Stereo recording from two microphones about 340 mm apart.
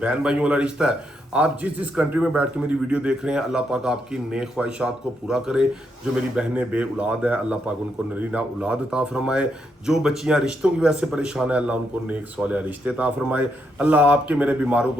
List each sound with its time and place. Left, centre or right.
0.0 s speech: centre